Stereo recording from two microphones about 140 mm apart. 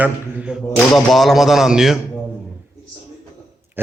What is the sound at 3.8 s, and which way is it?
Speech, 15° right (ahead or behind).